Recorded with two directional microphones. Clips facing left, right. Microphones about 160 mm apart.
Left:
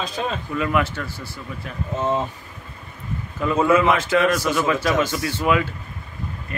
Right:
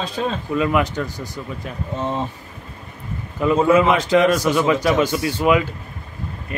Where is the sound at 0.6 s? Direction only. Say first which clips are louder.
Right 3 dB; 20° right (ahead or behind).